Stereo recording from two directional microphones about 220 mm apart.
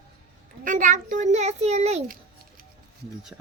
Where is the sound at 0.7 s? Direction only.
35° right (ahead or behind).